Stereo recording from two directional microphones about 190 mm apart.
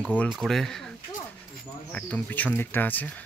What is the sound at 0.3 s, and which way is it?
Speech, centre (ahead or behind).